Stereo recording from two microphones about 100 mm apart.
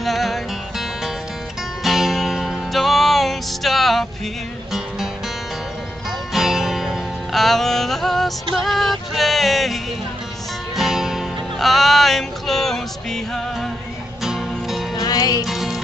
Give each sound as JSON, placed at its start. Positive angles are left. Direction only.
{"t": 0.0, "sound": "music", "side_deg": 0}
{"t": 6.3, "sound": "music", "side_deg": -5}
{"t": 10.8, "sound": "music", "side_deg": -5}
{"t": 15.0, "sound": "music", "side_deg": 40}
{"t": 15.4, "sound": "music", "side_deg": -5}